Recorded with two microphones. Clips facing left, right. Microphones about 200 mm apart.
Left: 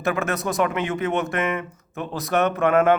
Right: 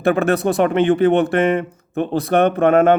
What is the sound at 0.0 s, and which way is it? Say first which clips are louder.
Speech: right 8 dB; 30° right (ahead or behind).